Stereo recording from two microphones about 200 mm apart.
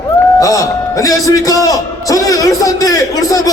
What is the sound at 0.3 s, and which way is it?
A man's voice, 15° left (ahead or behind).